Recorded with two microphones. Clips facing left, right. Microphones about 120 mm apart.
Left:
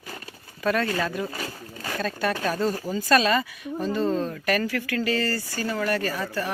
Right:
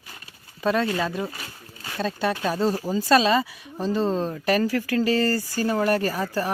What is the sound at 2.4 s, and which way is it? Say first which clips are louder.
Speech: right 2 dB; 30° right (ahead or behind).